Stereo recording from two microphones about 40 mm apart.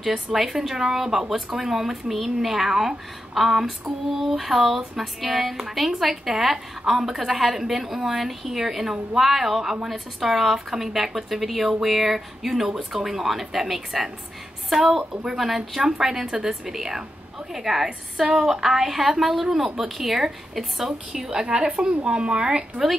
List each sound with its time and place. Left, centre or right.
0.1 s a woman's voice: centre